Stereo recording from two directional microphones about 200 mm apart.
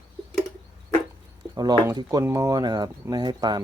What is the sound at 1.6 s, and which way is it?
Speech, 20° right (ahead or behind).